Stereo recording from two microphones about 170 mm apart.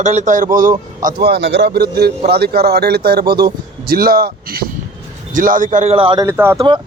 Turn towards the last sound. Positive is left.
turn(degrees=-15)  # may be behind; listen again after turning